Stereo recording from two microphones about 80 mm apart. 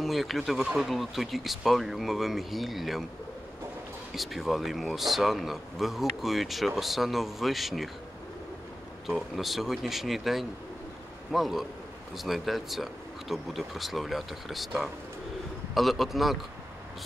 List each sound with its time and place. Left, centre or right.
0.0 s speech: centre
4.1 s speech: centre
9.0 s speech: centre